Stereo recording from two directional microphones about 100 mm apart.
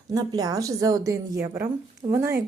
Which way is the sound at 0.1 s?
40° right (ahead or behind).